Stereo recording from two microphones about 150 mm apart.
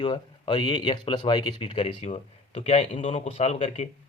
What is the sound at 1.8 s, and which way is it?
Speech, 45° left (ahead or behind).